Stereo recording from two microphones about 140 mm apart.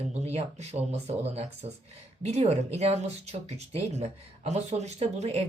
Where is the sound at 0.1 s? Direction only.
50° right (ahead or behind).